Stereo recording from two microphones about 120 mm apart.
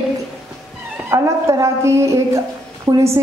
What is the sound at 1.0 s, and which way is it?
A woman's voice, 25° right (ahead or behind).